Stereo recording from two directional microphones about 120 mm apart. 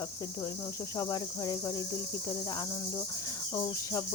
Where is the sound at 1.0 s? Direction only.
35° left (ahead or behind).